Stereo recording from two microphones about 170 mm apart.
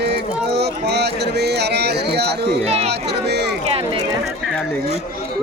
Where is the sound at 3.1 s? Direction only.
80° right.